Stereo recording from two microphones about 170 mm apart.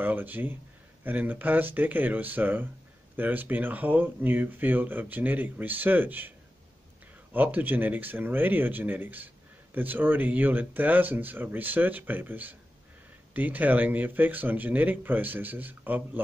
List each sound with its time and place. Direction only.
0.0 s speech: 10° right (ahead or behind)
7.3 s speech: 10° right (ahead or behind)